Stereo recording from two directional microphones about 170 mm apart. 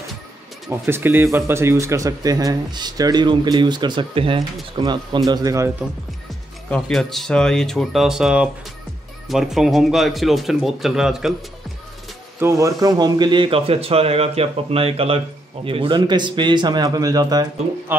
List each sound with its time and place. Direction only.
0.7 s speech: 15° right (ahead or behind)
6.7 s speech: centre (ahead or behind)
12.4 s speech: 15° right (ahead or behind)